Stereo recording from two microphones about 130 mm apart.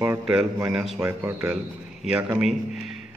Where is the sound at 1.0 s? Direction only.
20° right (ahead or behind).